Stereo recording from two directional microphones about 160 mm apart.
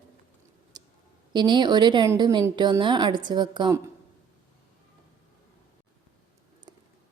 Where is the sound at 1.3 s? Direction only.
30° right (ahead or behind).